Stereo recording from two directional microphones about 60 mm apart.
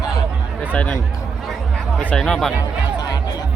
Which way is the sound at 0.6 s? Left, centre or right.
Left.